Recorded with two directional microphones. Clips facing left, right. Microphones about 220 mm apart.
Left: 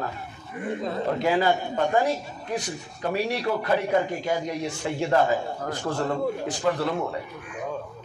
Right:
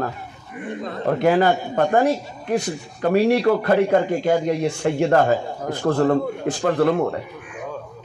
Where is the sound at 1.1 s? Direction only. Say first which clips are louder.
Right 6 dB; 55° right (ahead or behind).